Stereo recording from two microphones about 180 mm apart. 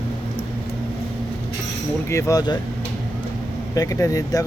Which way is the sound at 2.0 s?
15° left (ahead or behind).